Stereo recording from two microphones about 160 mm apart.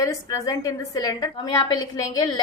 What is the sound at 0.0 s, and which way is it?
A woman's voice, 20° left (ahead or behind).